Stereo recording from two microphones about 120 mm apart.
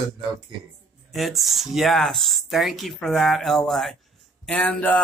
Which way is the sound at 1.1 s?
Centre (ahead or behind).